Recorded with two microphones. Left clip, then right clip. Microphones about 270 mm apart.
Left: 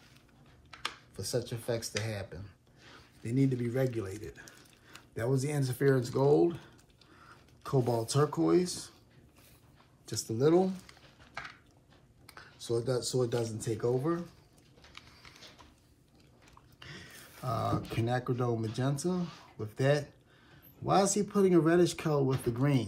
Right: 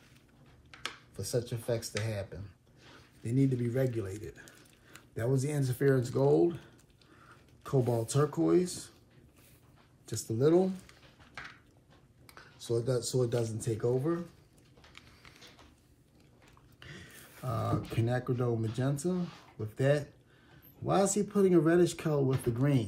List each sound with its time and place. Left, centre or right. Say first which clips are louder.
1.1 s speech: right 2 dB; left
4.2 s a sound: even; left
5.4 s speech: even; left
7.2 s a sound: left 2 dB; centre
7.9 s speech: left 1 dB; centre
10.4 s speech: even; left
12.3 s speech: even; left
16.8 s a sound: left 2 dB; centre
18.8 s speech: even; centre